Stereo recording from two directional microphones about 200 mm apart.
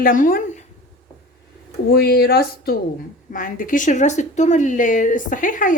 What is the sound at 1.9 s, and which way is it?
Speech, 50° left (ahead or behind).